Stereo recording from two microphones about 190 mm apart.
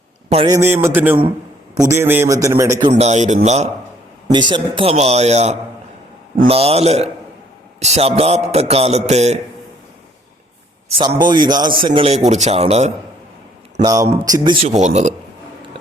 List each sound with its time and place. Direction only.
0.4 s a man's voice: 15° right (ahead or behind)
2.9 s a man's voice: 35° right (ahead or behind)
4.3 s a man's voice: 25° right (ahead or behind)
10.8 s a man's voice: 30° right (ahead or behind)
13.8 s a man's voice: 20° right (ahead or behind); by 15.1 s 35° right (ahead or behind)